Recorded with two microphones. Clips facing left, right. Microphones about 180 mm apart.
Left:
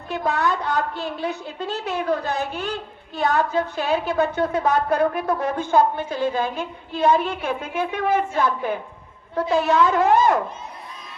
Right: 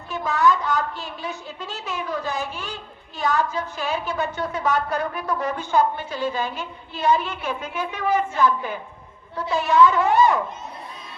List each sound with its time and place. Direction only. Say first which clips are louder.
0.1 s a woman's voice: right 2 dB; 60° left (ahead or behind)